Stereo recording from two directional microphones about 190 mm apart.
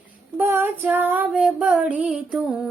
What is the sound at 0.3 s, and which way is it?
Female singing, 10° right (ahead or behind).